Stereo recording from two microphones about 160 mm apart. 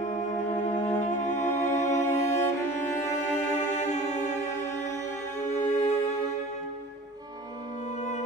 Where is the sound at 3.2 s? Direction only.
50° left (ahead or behind).